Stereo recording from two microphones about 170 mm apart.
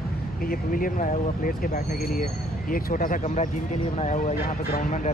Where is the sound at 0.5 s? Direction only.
55° left (ahead or behind).